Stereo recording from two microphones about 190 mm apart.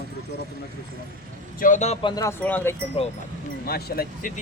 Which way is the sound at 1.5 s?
45° left (ahead or behind).